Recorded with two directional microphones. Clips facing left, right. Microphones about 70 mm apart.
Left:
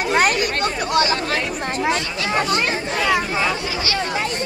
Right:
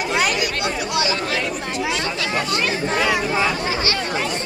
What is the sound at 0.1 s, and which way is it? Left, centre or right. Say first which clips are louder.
Chatter: left 4 dB; left.